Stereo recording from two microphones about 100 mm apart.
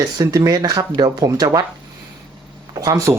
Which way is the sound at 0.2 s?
40° right (ahead or behind).